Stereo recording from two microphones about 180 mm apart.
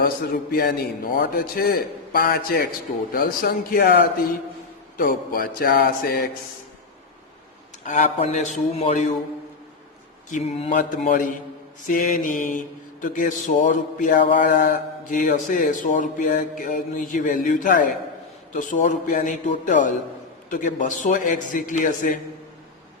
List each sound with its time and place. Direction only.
1.1 s a man's voice: 60° left (ahead or behind)
7.9 s speech: 45° left (ahead or behind)
10.2 s speech: 40° left (ahead or behind)
10.8 s speech: 50° left (ahead or behind)